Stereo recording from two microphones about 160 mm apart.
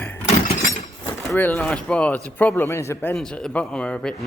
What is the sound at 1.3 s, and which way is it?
Speech, 15° left (ahead or behind).